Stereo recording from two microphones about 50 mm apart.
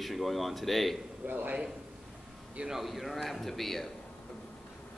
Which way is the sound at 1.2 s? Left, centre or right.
Right.